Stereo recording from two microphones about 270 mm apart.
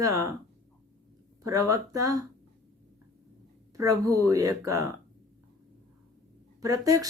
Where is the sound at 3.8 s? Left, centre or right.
Centre.